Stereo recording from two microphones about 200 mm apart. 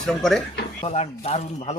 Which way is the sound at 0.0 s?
Centre (ahead or behind).